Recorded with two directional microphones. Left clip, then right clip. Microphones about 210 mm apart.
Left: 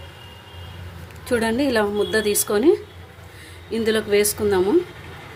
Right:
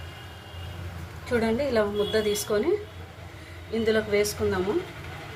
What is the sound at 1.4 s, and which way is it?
A woman's voice, 50° left (ahead or behind).